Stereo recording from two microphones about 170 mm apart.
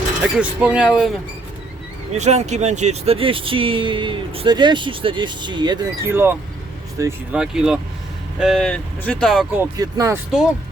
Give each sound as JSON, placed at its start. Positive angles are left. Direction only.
{"t": 0.2, "sound": "speech", "side_deg": -5}
{"t": 2.1, "sound": "speech", "side_deg": -40}
{"t": 6.1, "sound": "speech", "side_deg": -15}
{"t": 7.3, "sound": "speech", "side_deg": -5}
{"t": 9.7, "sound": "speech", "side_deg": -20}